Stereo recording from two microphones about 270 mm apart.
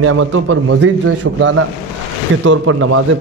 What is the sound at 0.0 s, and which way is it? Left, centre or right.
A man's voice, right.